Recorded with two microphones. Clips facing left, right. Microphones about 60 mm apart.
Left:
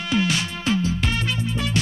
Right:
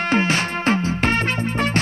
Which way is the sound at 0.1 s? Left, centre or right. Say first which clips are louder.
Right 1 dB; right.